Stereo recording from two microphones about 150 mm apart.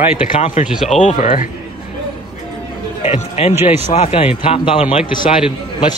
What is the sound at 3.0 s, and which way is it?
Speech, 50° left (ahead or behind).